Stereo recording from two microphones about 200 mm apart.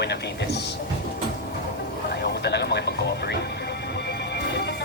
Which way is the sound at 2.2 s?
55° left (ahead or behind).